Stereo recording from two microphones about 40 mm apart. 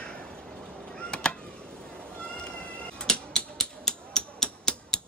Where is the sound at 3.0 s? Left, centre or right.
Centre.